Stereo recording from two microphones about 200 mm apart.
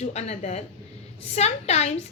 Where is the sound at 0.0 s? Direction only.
30° left (ahead or behind).